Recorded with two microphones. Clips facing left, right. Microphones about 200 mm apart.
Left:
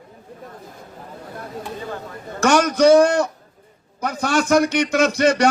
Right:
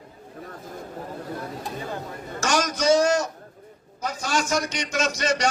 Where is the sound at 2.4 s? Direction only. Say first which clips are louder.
Left 9 dB; 60° left (ahead or behind).